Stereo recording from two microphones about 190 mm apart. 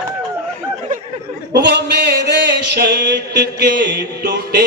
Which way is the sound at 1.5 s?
60° right (ahead or behind).